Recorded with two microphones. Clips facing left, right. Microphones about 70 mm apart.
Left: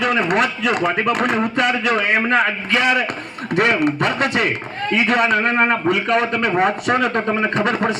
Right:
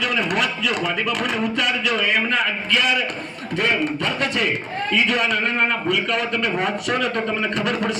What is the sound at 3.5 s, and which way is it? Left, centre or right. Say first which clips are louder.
A man's voice: left 5 dB; left.